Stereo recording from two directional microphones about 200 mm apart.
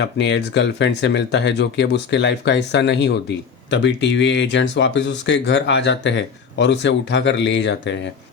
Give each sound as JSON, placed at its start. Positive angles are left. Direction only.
{"t": 0.0, "sound": "speech", "side_deg": 60}